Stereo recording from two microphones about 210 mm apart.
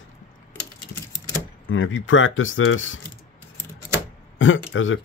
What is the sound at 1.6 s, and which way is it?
Speech, 65° left (ahead or behind).